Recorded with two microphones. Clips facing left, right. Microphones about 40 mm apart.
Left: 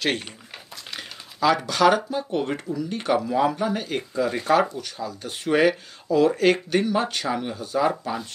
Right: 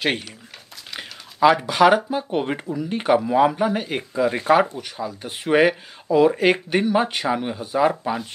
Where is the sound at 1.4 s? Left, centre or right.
Right.